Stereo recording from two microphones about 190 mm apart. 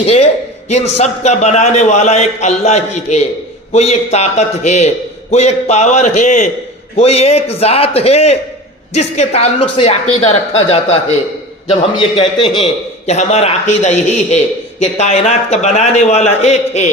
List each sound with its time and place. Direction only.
0.0 s a man's voice: 30° left (ahead or behind)